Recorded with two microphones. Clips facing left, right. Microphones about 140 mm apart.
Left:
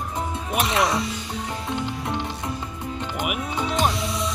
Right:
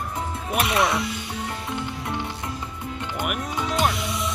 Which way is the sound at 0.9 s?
20° left (ahead or behind).